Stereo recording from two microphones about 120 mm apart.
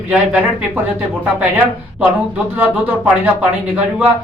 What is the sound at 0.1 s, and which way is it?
Speech, 10° right (ahead or behind).